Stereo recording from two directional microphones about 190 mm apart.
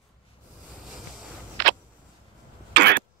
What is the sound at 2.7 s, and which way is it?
Cough, 55° right (ahead or behind).